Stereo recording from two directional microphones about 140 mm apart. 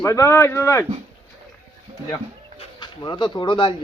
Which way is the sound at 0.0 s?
20° left (ahead or behind).